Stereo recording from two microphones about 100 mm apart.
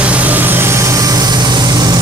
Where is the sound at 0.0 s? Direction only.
15° right (ahead or behind).